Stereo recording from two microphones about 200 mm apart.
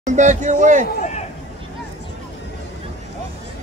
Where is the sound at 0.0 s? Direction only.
40° right (ahead or behind).